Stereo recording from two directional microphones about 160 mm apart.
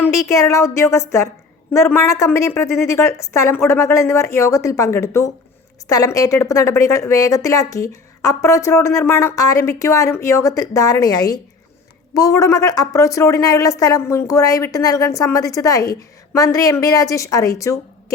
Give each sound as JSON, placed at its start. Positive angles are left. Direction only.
{"t": 0.0, "sound": "a woman's voice", "side_deg": 20}